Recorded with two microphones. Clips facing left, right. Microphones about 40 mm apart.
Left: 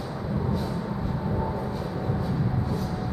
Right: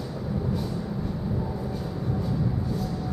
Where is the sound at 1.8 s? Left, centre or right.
Centre.